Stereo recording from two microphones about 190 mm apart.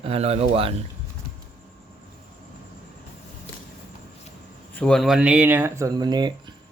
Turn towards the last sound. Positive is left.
turn(degrees=-20)  # may be behind; listen again after turning